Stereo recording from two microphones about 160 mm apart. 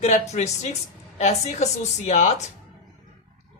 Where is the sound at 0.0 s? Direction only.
45° left (ahead or behind).